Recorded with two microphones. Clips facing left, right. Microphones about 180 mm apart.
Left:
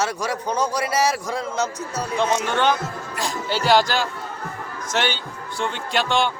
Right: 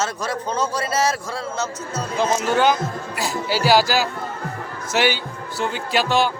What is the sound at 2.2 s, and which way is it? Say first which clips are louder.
A man's voice: right 3 dB; 5° right (ahead or behind).